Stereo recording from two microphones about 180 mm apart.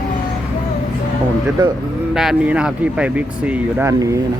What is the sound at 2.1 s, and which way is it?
Speech, 5° right (ahead or behind).